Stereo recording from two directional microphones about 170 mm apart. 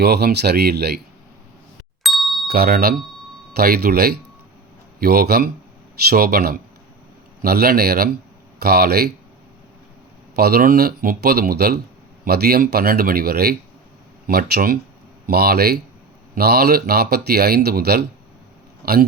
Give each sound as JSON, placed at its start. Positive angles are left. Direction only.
{"t": 0.0, "sound": "speech", "side_deg": -70}
{"t": 2.0, "sound": "ding", "side_deg": 0}
{"t": 2.5, "sound": "speech", "side_deg": -60}
{"t": 10.3, "sound": "speech", "side_deg": -65}